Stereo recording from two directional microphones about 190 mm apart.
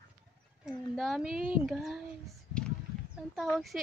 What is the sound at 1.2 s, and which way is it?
Speech, 45° right (ahead or behind).